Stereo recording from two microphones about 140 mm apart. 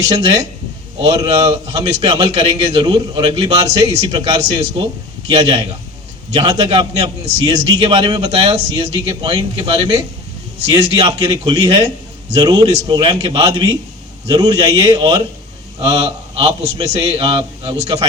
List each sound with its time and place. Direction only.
1.0 s a man's voice: 35° right (ahead or behind)